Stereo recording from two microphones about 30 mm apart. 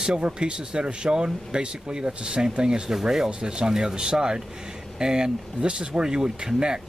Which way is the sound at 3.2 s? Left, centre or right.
Right.